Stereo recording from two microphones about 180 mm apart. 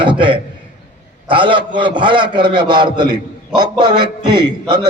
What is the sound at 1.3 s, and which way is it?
A man's voice, 30° right (ahead or behind).